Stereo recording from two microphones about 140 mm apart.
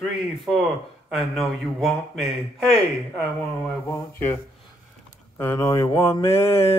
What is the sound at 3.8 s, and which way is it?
Mantra, 20° left (ahead or behind).